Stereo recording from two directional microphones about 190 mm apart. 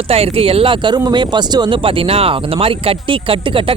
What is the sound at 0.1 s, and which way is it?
Speech, 30° right (ahead or behind).